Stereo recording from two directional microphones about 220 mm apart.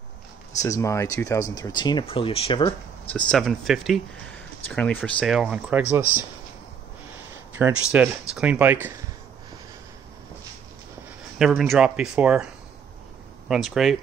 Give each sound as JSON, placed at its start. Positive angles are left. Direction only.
{"t": 0.6, "sound": "speech", "side_deg": 15}
{"t": 3.1, "sound": "speech", "side_deg": 5}
{"t": 7.5, "sound": "speech", "side_deg": -5}
{"t": 11.3, "sound": "speech", "side_deg": 0}
{"t": 13.5, "sound": "speech", "side_deg": 0}